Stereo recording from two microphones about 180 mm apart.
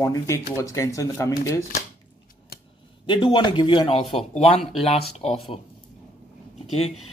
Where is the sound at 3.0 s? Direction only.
25° left (ahead or behind).